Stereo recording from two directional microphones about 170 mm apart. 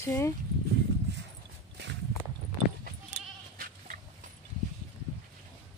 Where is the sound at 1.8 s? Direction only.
90° right.